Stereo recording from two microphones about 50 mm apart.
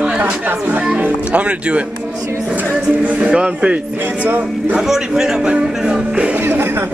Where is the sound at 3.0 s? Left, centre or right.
Right.